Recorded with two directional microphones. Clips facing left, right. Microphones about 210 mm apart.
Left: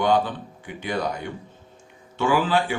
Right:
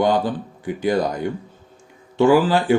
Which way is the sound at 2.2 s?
40° right (ahead or behind).